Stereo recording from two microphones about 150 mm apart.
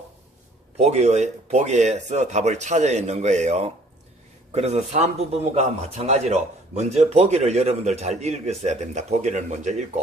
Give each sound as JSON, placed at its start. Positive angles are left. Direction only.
{"t": 0.8, "sound": "a man's voice", "side_deg": -45}